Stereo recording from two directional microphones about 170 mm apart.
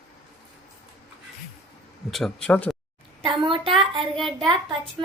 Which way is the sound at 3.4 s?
30° right (ahead or behind).